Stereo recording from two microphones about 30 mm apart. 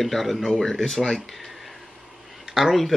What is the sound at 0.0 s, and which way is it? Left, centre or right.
Speech, centre.